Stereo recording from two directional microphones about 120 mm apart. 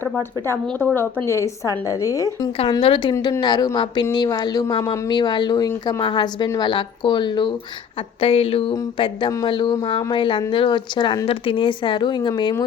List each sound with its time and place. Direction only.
0.0 s a woman's voice: 20° left (ahead or behind)
2.8 s speech: 45° left (ahead or behind)
8.2 s speech: 55° left (ahead or behind)